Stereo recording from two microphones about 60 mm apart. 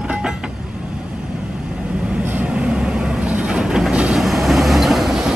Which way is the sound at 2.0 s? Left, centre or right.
Centre.